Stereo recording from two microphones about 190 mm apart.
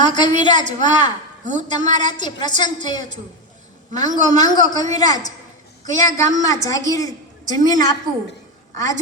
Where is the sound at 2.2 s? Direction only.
20° left (ahead or behind).